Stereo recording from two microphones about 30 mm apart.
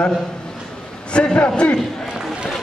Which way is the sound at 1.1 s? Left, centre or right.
Left.